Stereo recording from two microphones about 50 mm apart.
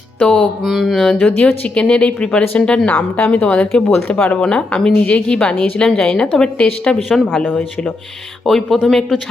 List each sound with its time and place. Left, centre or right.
0.2 s a woman's voice: left
0.6 s mantra: centre
1.2 s a woman's voice: left
3.8 s a woman's voice: centre
4.1 s a woman's voice: left
6.0 s a woman's voice: centre
7.1 s speech: centre
8.4 s a woman's voice: centre